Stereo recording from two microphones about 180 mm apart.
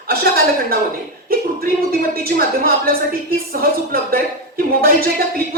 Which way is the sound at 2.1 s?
55° right (ahead or behind).